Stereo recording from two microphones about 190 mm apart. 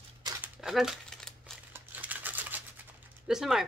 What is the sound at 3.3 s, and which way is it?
Speech, centre (ahead or behind).